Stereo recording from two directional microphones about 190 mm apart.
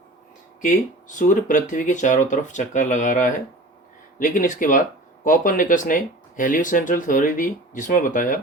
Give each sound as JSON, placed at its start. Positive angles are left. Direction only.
{"t": 0.6, "sound": "speech", "side_deg": 45}